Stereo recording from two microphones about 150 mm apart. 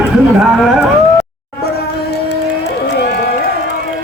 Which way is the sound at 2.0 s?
90° left.